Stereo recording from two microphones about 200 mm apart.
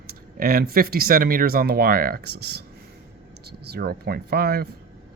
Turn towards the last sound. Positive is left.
turn(degrees=-50)  # may be behind; listen again after turning